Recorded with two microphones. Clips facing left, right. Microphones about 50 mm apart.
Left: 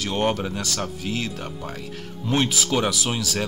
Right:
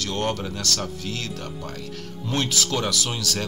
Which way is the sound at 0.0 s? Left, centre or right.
Centre.